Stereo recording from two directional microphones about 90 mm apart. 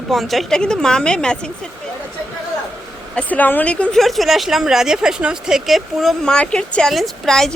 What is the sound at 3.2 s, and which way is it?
Speech, 20° left (ahead or behind).